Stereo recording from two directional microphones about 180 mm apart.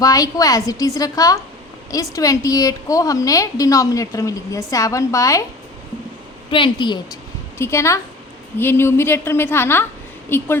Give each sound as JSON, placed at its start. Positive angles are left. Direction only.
{"t": 0.0, "sound": "a woman's voice", "side_deg": 20}
{"t": 6.5, "sound": "a woman's voice", "side_deg": 25}